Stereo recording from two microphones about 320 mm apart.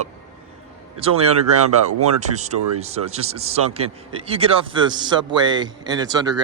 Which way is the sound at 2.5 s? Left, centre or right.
Right.